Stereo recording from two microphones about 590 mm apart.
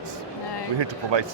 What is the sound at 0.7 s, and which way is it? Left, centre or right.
Speech, right.